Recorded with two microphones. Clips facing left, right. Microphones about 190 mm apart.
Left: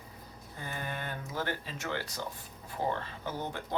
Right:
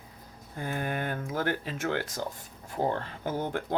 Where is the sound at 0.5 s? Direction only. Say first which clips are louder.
Right 7 dB; 50° right (ahead or behind).